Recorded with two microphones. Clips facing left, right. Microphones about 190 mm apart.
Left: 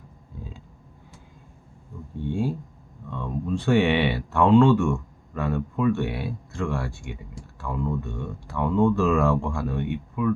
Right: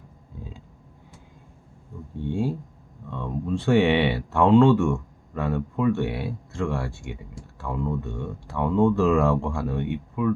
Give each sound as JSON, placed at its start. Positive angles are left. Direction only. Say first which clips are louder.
{"t": 3.1, "sound": "speech", "louder": "even", "side_deg": -25}